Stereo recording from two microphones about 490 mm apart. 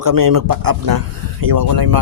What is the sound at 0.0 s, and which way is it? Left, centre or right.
Speech, right.